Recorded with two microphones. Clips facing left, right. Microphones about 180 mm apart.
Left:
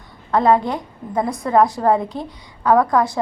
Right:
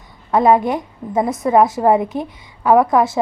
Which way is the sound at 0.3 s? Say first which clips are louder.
Right 2 dB; 20° right (ahead or behind).